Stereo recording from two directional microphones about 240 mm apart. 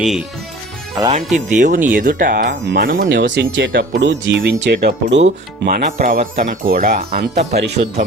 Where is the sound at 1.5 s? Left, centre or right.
Right.